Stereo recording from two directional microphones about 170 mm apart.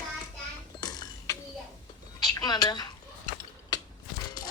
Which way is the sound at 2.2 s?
25° left (ahead or behind).